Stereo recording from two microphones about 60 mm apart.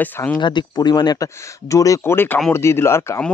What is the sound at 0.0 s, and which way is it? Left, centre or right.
Speech, left.